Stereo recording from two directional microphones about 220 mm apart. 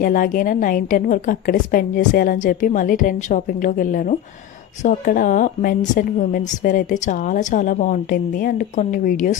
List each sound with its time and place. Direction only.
0.0 s a woman's voice: 40° left (ahead or behind)